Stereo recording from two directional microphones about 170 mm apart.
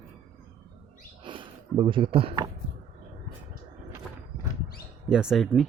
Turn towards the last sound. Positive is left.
turn(degrees=0)  # may be behind; listen again after turning